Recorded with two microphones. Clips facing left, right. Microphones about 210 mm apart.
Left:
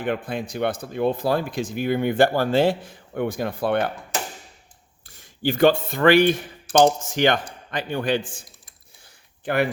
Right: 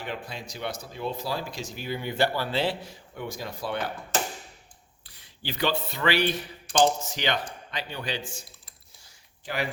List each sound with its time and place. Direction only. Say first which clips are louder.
0.0 s speech: left 10 dB; 55° left (ahead or behind)
5.0 s a man's voice: left 13 dB; 45° left (ahead or behind)